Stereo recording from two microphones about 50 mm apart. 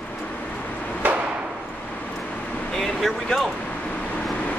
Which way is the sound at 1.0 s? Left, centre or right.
Right.